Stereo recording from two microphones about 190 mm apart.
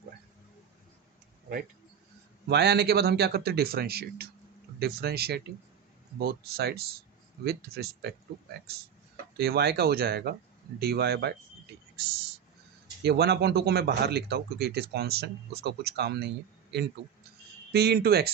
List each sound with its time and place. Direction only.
2.5 s speech: 60° right (ahead or behind)
9.4 s speech: 60° right (ahead or behind)
17.7 s speech: 55° right (ahead or behind)